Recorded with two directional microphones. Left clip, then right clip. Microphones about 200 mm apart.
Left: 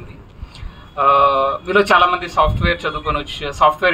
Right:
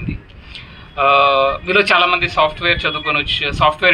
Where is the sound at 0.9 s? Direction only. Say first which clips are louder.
Right 1 dB; 75° left (ahead or behind).